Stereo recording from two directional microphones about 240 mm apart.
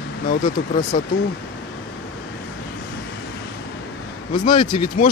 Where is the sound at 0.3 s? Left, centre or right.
Left.